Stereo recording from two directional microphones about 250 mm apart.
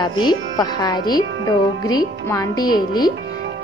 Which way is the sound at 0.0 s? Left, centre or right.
Centre.